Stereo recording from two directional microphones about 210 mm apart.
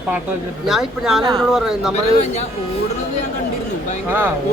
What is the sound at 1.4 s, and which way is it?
Speech, centre (ahead or behind).